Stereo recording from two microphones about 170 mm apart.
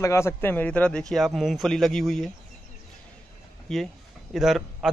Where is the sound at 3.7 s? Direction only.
Centre (ahead or behind).